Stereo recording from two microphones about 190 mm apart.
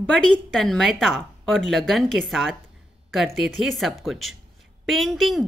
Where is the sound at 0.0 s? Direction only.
5° left (ahead or behind).